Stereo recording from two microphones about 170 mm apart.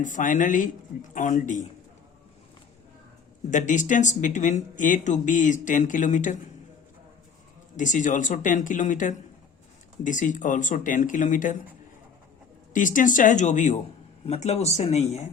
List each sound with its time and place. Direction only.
0.0 s speech: 50° left (ahead or behind)
3.5 s speech: 45° left (ahead or behind)
7.8 s speech: 45° left (ahead or behind)
12.7 s speech: 50° left (ahead or behind)